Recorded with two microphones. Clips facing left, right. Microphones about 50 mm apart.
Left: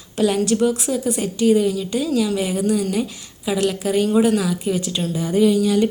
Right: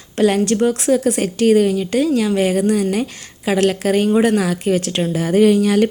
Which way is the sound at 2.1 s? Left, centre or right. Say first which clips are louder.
Right 4 dB; right.